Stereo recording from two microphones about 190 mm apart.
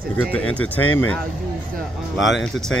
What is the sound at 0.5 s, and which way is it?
Speech, 10° left (ahead or behind).